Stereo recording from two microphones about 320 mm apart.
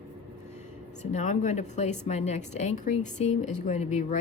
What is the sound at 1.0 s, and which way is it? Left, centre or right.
Speech, left.